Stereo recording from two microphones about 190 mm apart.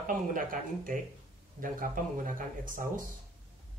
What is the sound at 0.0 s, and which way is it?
Speech, 45° right (ahead or behind).